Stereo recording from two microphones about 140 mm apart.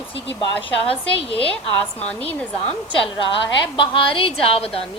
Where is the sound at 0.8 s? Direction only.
40° left (ahead or behind).